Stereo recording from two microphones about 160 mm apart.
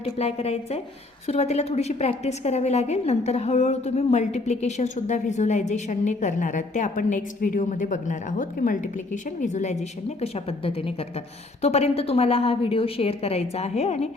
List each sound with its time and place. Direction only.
0.0 s a woman's voice: 40° left (ahead or behind)
10.2 s a woman's voice: 40° left (ahead or behind)